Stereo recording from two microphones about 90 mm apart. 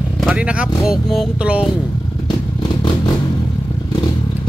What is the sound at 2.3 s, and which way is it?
Vehicle, 50° left (ahead or behind).